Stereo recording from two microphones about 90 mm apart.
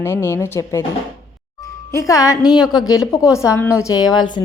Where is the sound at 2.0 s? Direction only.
40° left (ahead or behind).